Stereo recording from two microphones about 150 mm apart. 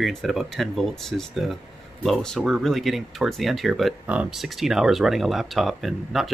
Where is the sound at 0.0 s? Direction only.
Centre (ahead or behind).